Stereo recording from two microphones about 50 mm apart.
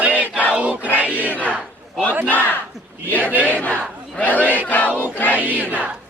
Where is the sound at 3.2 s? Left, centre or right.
Right.